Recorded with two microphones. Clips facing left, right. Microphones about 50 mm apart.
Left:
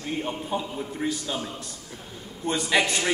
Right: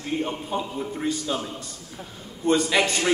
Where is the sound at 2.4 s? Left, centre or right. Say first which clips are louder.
Right 3 dB; centre.